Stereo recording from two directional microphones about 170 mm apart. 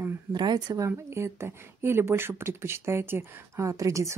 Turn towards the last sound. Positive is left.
turn(degrees=-15)  # may be behind; listen again after turning